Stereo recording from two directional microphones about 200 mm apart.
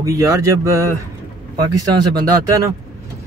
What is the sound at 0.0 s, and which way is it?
Speech, 15° right (ahead or behind).